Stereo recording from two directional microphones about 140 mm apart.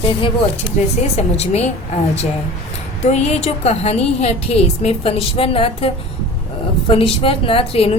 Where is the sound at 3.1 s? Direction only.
50° left (ahead or behind).